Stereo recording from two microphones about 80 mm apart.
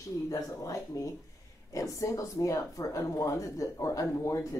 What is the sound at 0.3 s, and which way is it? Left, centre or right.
Speech, left.